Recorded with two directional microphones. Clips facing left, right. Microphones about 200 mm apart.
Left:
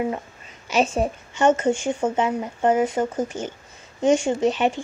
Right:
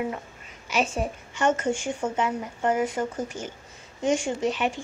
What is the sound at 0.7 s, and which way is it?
Speech, 25° left (ahead or behind).